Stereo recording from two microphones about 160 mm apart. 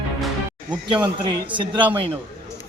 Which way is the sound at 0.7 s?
30° right (ahead or behind).